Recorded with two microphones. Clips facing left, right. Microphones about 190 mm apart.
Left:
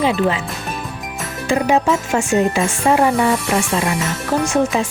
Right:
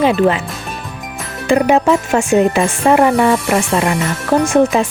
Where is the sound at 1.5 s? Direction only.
60° right (ahead or behind).